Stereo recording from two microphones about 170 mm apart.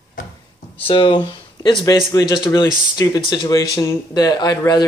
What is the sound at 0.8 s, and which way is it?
Speech, 35° left (ahead or behind).